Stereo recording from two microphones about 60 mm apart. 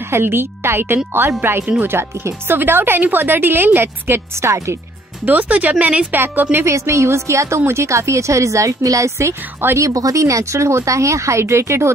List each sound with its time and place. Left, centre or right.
0.1 s speech: right
5.2 s speech: right
6.1 s speech: right
6.6 s a woman's voice: right
9.8 s a woman's voice: right